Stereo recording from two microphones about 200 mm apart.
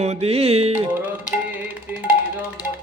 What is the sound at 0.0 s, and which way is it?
Music, 30° right (ahead or behind).